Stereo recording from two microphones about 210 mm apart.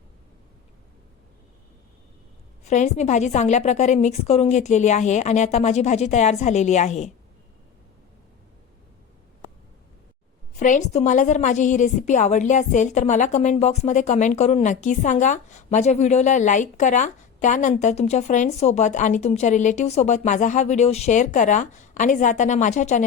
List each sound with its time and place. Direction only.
2.6 s a woman's voice: 35° left (ahead or behind)
10.6 s a woman's voice: 35° left (ahead or behind)